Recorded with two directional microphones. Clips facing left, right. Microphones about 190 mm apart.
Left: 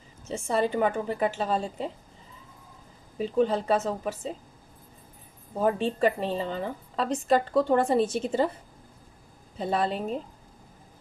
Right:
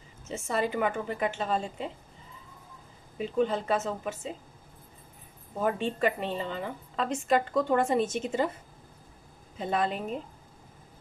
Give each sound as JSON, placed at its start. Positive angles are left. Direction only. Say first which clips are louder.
{"t": 0.3, "sound": "a woman's voice", "louder": "left 3 dB", "side_deg": 30}
{"t": 3.2, "sound": "a woman's voice", "louder": "left 3 dB", "side_deg": 35}
{"t": 5.6, "sound": "a woman's voice", "louder": "left 3 dB", "side_deg": 35}
{"t": 9.6, "sound": "a woman's voice", "louder": "left 2 dB", "side_deg": 35}